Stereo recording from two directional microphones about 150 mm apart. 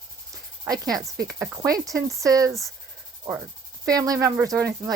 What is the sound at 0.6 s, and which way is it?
Speech, 25° right (ahead or behind).